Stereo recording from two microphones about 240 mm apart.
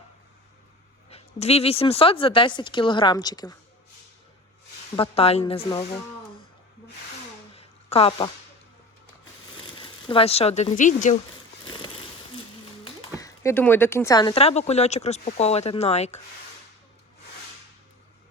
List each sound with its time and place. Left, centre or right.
1.1 s speech: left
4.9 s speech: left
7.5 s a sound: left
9.7 s speech: left
11.6 s a sound: centre
12.8 s speech: centre